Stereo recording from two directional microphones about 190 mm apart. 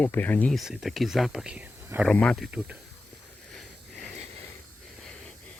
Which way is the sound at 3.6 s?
Centre (ahead or behind).